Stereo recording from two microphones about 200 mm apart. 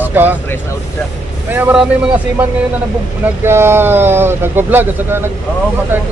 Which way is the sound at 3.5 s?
10° right (ahead or behind).